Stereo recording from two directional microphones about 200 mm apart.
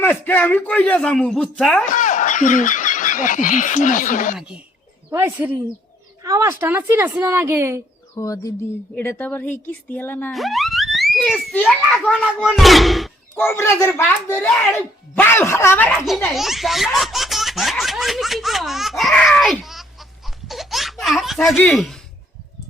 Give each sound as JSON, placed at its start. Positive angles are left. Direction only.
{"t": 0.0, "sound": "speech", "side_deg": 10}
{"t": 1.9, "sound": "speech", "side_deg": 40}
{"t": 4.4, "sound": "a woman's voice", "side_deg": -5}
{"t": 8.1, "sound": "speech", "side_deg": 15}
{"t": 10.3, "sound": "a child's voice", "side_deg": 0}
{"t": 13.3, "sound": "speech", "side_deg": 10}
{"t": 20.5, "sound": "baby laughter", "side_deg": 0}